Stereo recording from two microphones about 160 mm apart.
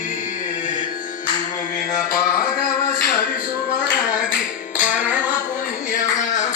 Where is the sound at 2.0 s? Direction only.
65° left (ahead or behind).